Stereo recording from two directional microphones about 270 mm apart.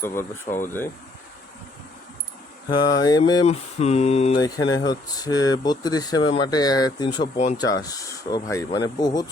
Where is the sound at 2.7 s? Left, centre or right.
Centre.